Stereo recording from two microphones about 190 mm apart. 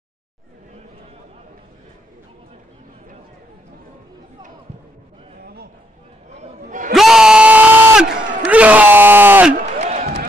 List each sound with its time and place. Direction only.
6.4 s chatter: 45° right (ahead or behind)
6.9 s a sound: centre (ahead or behind)
8.5 s bellow: 5° right (ahead or behind)
9.8 s music: 40° right (ahead or behind)